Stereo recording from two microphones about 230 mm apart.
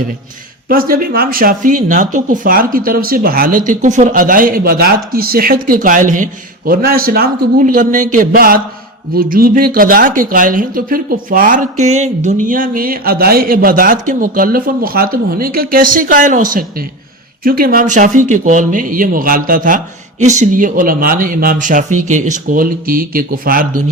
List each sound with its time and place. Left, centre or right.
0.7 s speech: right